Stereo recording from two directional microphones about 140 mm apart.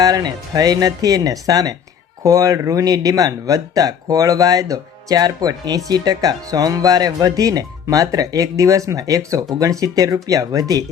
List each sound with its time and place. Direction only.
0.0 s speech: 30° right (ahead or behind)